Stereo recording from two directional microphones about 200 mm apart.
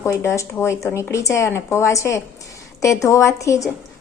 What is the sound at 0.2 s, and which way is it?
Speech, 15° left (ahead or behind).